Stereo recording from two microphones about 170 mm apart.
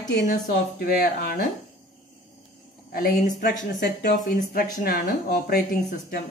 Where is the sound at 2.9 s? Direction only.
60° left (ahead or behind).